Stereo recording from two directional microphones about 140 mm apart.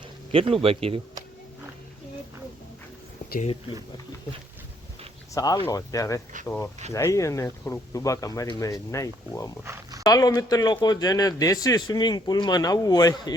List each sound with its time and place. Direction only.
0.3 s speech: 40° right (ahead or behind)
3.4 s speech: 35° left (ahead or behind)
5.3 s speech: 25° left (ahead or behind)